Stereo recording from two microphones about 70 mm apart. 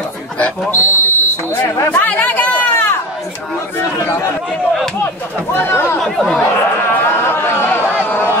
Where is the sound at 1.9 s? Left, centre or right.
Left.